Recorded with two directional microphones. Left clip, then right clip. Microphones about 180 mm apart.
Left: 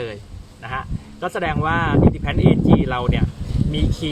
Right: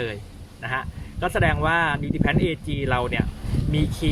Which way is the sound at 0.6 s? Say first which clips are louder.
Even; 10° right (ahead or behind).